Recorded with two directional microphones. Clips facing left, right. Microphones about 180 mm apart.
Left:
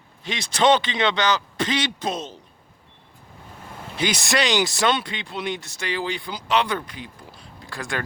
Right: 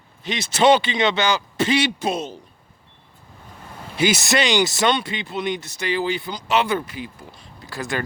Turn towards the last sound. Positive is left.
turn(degrees=-5)  # may be behind; listen again after turning